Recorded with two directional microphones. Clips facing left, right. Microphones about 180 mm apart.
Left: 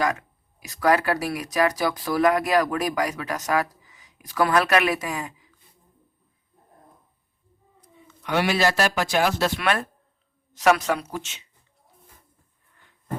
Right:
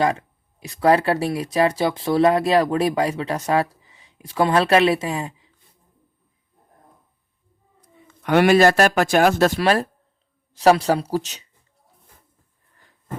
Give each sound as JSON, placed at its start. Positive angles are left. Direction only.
{"t": 0.0, "sound": "speech", "side_deg": -30}
{"t": 8.2, "sound": "speech", "side_deg": -55}
{"t": 9.6, "sound": "speech", "side_deg": -30}